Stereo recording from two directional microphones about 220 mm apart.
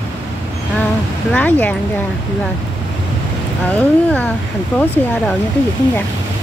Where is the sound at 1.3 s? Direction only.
5° left (ahead or behind).